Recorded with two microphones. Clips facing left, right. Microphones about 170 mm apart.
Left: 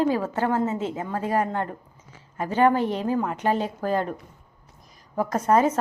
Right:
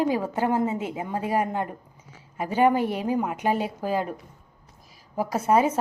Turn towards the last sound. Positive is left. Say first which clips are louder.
# left 1 dB
turn(degrees=-10)  # may be behind; listen again after turning